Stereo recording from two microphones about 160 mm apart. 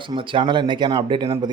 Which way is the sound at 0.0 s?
30° right (ahead or behind).